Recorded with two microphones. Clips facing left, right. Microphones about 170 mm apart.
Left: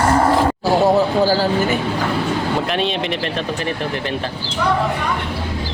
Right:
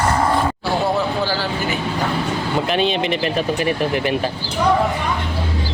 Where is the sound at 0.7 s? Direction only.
40° left (ahead or behind).